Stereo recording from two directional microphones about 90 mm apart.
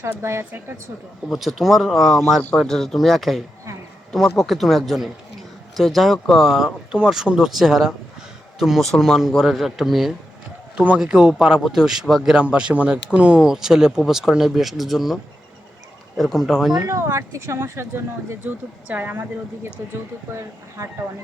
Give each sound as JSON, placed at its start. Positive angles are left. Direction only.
{"t": 0.0, "sound": "speech", "side_deg": -30}
{"t": 1.3, "sound": "speech", "side_deg": 0}
{"t": 10.8, "sound": "a man's voice", "side_deg": -15}
{"t": 16.7, "sound": "speech", "side_deg": -40}